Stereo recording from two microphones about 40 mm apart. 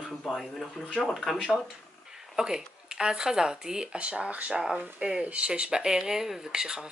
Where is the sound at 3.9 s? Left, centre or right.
Right.